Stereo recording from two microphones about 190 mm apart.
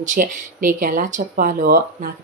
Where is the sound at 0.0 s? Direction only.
45° right (ahead or behind).